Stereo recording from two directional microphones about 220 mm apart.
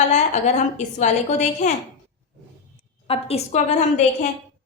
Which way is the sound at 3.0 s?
30° left (ahead or behind).